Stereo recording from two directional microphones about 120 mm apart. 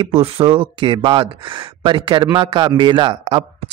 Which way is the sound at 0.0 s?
55° right (ahead or behind).